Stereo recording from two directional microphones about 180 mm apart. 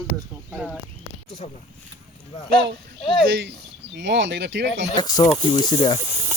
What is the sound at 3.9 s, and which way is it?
Speech, 85° right.